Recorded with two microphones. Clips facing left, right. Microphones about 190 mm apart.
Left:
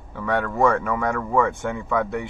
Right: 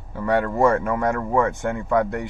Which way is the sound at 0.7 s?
Centre (ahead or behind).